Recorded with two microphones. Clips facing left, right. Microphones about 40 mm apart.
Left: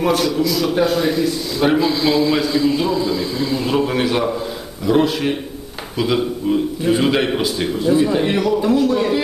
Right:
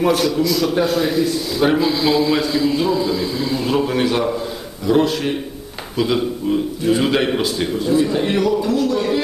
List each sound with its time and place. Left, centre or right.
0.0 s a man's voice: centre
8.5 s a man's voice: centre